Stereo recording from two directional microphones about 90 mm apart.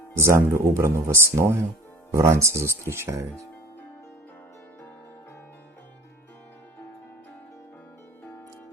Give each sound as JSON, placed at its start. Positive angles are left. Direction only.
{"t": 0.2, "sound": "speech", "side_deg": -30}